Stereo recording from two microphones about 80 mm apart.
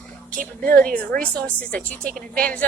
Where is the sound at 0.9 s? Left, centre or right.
Centre.